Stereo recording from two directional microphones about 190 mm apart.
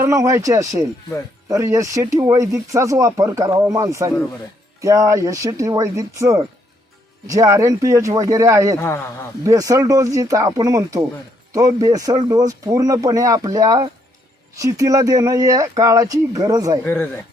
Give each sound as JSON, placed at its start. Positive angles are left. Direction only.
{"t": 0.0, "sound": "speech", "side_deg": -15}
{"t": 16.8, "sound": "speech", "side_deg": 10}